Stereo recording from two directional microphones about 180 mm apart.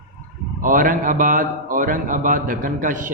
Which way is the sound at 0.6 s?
50° right (ahead or behind).